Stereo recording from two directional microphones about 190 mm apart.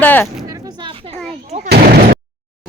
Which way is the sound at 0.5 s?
20° right (ahead or behind).